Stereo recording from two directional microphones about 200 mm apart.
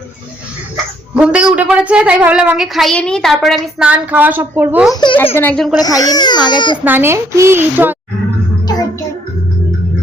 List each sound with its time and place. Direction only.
1.1 s a woman's voice: 5° right (ahead or behind)
5.1 s a woman's voice: 10° left (ahead or behind)
5.8 s speech: 20° left (ahead or behind)
6.8 s a woman's voice: 10° right (ahead or behind)